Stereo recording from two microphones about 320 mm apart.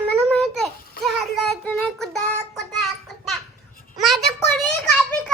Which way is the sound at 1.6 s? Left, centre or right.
Centre.